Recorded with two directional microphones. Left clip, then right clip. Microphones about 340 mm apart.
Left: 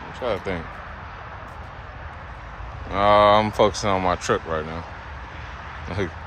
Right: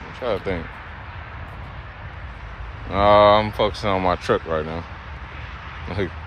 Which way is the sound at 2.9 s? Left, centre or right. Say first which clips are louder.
Right 2 dB; centre.